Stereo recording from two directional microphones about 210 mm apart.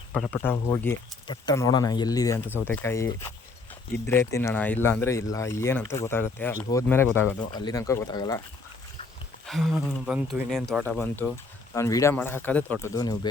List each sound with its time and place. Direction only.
0.1 s speech: 5° left (ahead or behind)
9.5 s speech: centre (ahead or behind)
10.8 s speech: 10° left (ahead or behind)